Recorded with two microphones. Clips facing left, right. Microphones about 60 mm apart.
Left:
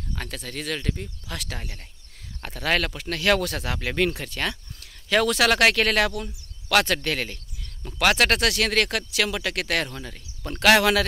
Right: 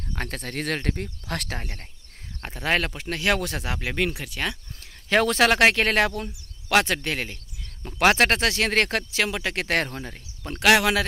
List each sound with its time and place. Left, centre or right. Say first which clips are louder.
0.1 s speech: right 3 dB; right
1.6 s speech: right 2 dB; right
2.4 s speech: even; right
4.7 s speech: right 1 dB; right
10.4 s speech: left 1 dB; centre